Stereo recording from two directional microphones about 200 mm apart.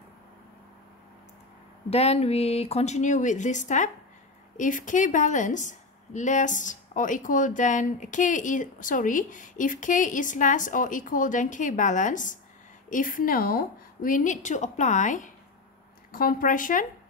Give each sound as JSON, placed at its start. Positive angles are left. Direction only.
{"t": 1.9, "sound": "a woman's voice", "side_deg": 30}